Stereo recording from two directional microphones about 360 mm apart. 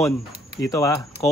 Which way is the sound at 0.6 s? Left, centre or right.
Centre.